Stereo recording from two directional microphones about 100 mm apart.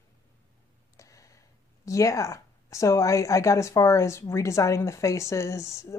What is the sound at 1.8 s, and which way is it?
A woman's voice, 35° left (ahead or behind).